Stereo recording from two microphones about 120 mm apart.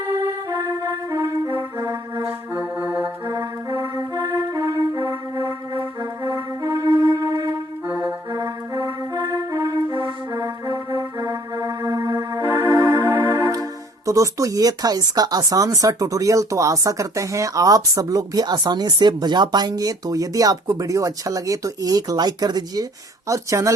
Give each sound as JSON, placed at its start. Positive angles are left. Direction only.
{"t": 0.0, "sound": "music", "side_deg": -35}
{"t": 1.8, "sound": "music", "side_deg": -35}
{"t": 2.2, "sound": "music", "side_deg": -15}
{"t": 3.7, "sound": "music", "side_deg": -30}
{"t": 7.2, "sound": "music", "side_deg": -35}
{"t": 7.4, "sound": "music", "side_deg": -15}
{"t": 10.9, "sound": "music", "side_deg": -30}
{"t": 13.3, "sound": "music", "side_deg": -30}
{"t": 14.1, "sound": "speech", "side_deg": -25}